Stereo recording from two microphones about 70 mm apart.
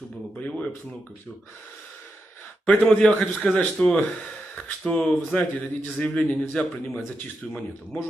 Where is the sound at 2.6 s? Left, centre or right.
Centre.